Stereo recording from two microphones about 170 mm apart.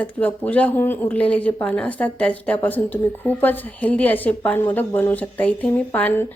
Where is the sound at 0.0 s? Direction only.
10° left (ahead or behind).